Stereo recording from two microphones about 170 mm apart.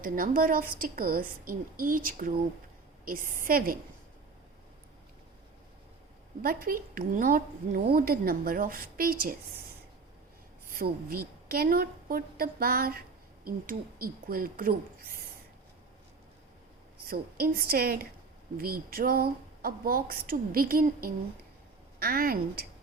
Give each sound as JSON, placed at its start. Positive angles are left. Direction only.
{"t": 0.0, "sound": "a woman's voice", "side_deg": -55}
{"t": 6.4, "sound": "a woman's voice", "side_deg": -60}
{"t": 10.8, "sound": "a woman's voice", "side_deg": -60}
{"t": 17.1, "sound": "a woman's voice", "side_deg": -60}